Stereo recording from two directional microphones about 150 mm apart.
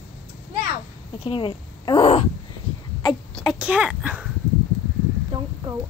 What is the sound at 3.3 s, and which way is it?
Speech, 5° right (ahead or behind).